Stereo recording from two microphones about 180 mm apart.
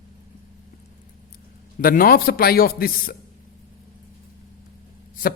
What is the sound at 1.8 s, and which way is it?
A man's voice, 50° left (ahead or behind).